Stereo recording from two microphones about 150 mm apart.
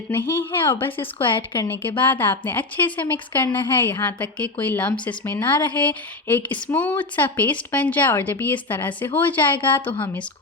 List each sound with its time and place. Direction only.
0.1 s a woman's voice: 15° left (ahead or behind)
1.2 s speech: 35° left (ahead or behind)
2.0 s a woman's voice: 15° left (ahead or behind)